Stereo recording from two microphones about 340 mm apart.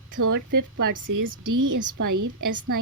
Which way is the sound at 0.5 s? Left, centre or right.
Right.